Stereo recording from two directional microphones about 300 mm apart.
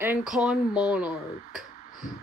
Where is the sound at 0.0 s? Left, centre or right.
Centre.